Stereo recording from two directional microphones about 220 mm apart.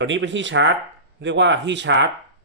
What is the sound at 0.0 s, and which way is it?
Speech, 55° right (ahead or behind).